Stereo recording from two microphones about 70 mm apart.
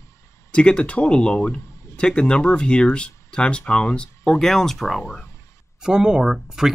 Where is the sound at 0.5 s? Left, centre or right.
Centre.